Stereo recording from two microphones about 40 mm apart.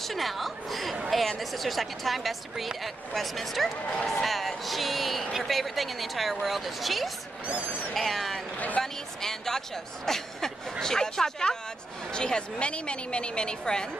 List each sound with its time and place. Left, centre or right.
0.0 s speech: centre
8.5 s speech: left
8.8 s a woman's voice: centre